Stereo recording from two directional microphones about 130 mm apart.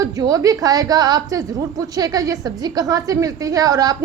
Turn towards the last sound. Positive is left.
turn(degrees=-30)  # may be behind; listen again after turning